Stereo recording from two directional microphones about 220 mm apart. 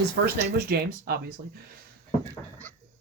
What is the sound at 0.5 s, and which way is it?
Speech, 45° right (ahead or behind).